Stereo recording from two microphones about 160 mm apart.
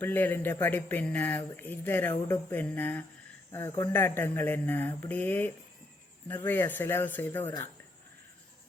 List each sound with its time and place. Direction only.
0.0 s speech: 10° left (ahead or behind)